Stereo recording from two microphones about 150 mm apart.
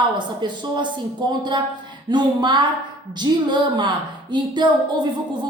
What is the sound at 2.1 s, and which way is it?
A woman's voice, 30° right (ahead or behind).